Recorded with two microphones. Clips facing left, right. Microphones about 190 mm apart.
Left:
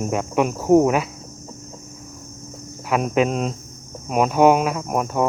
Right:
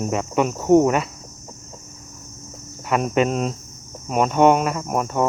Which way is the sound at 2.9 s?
Centre (ahead or behind).